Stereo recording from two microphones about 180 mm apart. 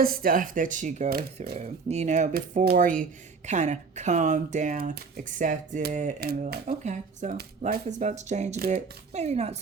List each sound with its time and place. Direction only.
0.0 s speech: 55° right (ahead or behind); by 9.6 s 35° right (ahead or behind)